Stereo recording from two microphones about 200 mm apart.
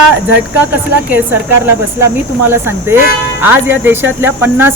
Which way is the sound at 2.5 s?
10° right (ahead or behind).